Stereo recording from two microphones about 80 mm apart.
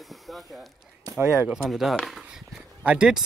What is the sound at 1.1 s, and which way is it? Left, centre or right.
Speech, right.